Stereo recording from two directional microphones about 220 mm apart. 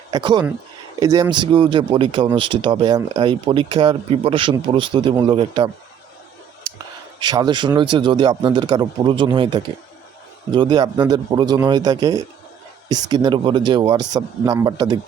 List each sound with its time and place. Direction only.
0.1 s speech: 20° right (ahead or behind)
7.2 s a man's voice: 20° right (ahead or behind)